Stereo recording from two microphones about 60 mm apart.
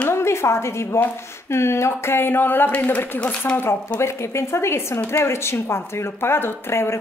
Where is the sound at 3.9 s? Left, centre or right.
Left.